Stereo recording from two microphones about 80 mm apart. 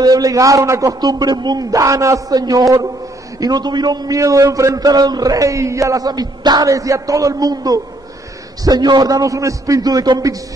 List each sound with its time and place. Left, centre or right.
0.0 s a man's voice: right
4.2 s a man's voice: right
6.7 s a man's voice: right